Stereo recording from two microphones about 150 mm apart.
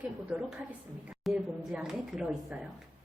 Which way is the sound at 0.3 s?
10° right (ahead or behind).